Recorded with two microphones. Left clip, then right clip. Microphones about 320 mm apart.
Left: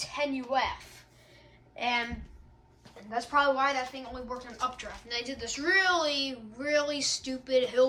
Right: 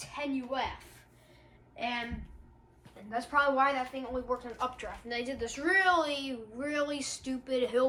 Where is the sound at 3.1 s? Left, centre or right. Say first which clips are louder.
Left 2 dB; centre.